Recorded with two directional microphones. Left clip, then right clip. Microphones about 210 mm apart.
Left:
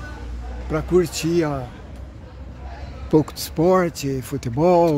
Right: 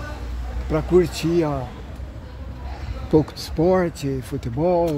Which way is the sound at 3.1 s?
20° left (ahead or behind).